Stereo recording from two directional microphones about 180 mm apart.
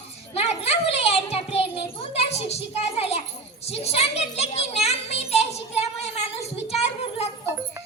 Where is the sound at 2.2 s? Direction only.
35° left (ahead or behind).